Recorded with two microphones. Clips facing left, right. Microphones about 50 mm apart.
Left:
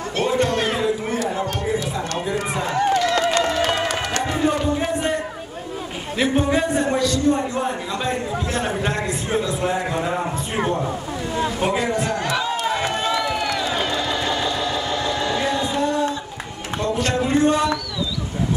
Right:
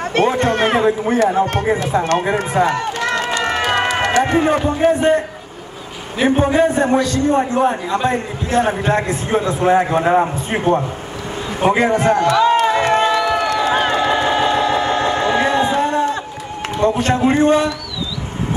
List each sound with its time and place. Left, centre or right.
0.1 s a sound: right
3.4 s music: right
4.2 s a man's voice: right
6.9 s a man's voice: right
11.3 s a sound: right
16.8 s a man's voice: right